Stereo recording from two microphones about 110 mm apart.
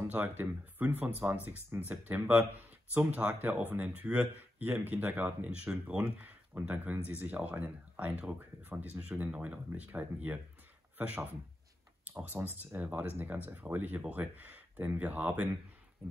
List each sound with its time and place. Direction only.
0.4 s speech: 15° right (ahead or behind)